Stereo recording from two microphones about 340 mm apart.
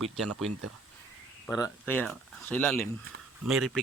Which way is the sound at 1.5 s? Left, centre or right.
Centre.